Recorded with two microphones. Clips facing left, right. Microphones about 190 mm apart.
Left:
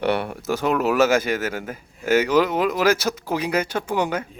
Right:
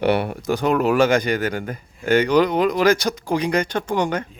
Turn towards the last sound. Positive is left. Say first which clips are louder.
# right 2 dB
turn(degrees=5)  # may be behind; listen again after turning